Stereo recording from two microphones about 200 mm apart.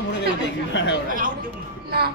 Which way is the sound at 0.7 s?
65° left (ahead or behind).